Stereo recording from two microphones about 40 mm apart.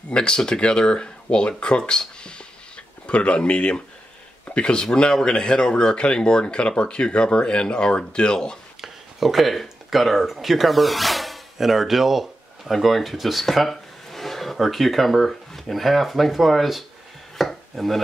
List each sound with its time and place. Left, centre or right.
0.1 s speech: left
8.8 s speech: centre
17.4 s chopping: centre